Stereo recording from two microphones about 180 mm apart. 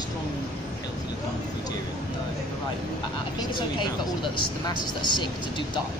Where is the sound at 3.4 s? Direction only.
25° left (ahead or behind).